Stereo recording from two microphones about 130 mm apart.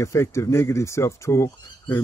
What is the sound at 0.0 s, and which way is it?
Speech, 20° left (ahead or behind).